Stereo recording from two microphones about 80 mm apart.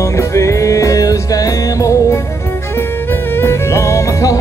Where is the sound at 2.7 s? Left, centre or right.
Left.